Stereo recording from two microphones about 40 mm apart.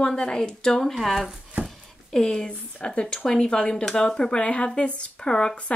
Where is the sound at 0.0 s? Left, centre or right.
Left.